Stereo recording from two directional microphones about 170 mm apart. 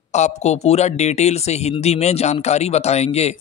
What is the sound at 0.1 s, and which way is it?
Speech, 40° left (ahead or behind).